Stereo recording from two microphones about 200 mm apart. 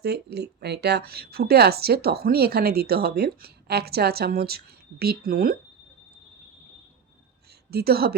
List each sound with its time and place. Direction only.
0.0 s speech: 55° right (ahead or behind)
7.7 s speech: 50° right (ahead or behind)